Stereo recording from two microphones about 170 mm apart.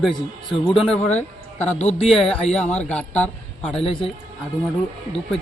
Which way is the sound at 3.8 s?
30° left (ahead or behind).